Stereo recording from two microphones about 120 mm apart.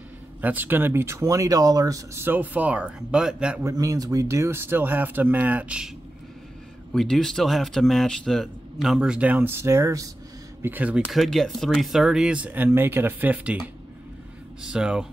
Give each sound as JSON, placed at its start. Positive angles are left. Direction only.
{"t": 0.4, "sound": "speech", "side_deg": -15}
{"t": 3.6, "sound": "speech", "side_deg": -30}
{"t": 6.9, "sound": "speech", "side_deg": 5}
{"t": 10.6, "sound": "speech", "side_deg": -15}
{"t": 11.1, "sound": "speech", "side_deg": 0}
{"t": 14.6, "sound": "speech", "side_deg": -10}